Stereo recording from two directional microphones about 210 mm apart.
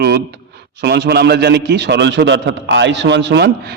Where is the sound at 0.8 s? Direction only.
50° right (ahead or behind).